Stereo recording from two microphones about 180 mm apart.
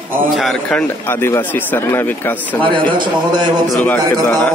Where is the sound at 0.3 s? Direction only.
Centre (ahead or behind).